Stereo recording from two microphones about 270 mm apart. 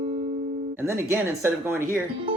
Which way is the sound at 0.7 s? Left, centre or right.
Centre.